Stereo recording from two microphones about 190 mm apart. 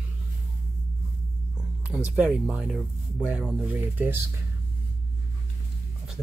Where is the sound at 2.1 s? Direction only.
5° right (ahead or behind).